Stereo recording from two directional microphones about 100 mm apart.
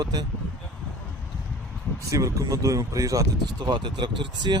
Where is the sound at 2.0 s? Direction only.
30° right (ahead or behind).